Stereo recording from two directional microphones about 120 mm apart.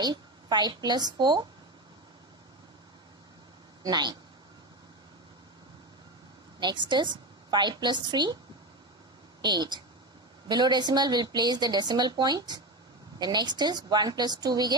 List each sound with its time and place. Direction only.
0.0 s a woman's voice: 35° right (ahead or behind)
3.8 s speech: 35° right (ahead or behind)
6.6 s speech: 40° right (ahead or behind)
9.4 s speech: 35° right (ahead or behind)